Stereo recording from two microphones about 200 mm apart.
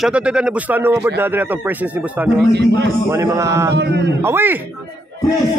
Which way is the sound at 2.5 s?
55° right (ahead or behind).